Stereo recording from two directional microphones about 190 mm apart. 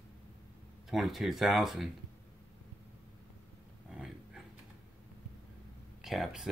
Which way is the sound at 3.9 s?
5° right (ahead or behind).